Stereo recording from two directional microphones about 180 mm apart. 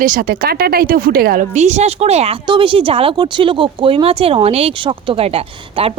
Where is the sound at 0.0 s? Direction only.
50° right (ahead or behind).